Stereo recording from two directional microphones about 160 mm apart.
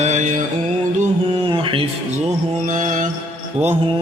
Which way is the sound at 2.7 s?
55° right (ahead or behind).